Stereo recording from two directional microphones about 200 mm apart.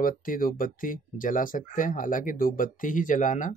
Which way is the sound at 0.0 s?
45° left (ahead or behind).